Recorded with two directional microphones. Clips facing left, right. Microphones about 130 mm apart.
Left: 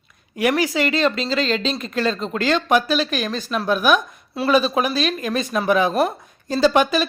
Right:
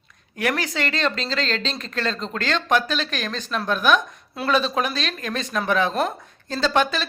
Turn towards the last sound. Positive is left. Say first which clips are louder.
# left 5 dB
turn(degrees=10)  # may be behind; listen again after turning